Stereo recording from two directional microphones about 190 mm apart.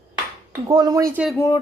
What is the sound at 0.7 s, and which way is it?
Speech, 20° right (ahead or behind).